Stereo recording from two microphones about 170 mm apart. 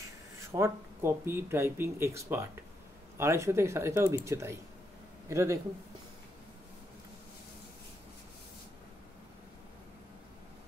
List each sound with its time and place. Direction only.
0.0 s speech: 15° right (ahead or behind)